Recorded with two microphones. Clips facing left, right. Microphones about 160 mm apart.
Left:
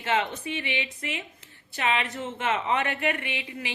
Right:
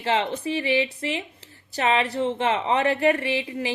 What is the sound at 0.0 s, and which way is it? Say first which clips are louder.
A woman's voice: right 3 dB; 30° right (ahead or behind).